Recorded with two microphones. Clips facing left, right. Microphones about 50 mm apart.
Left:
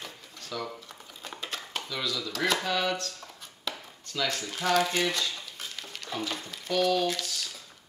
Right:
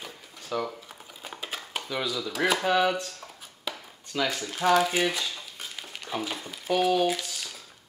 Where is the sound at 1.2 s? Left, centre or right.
Centre.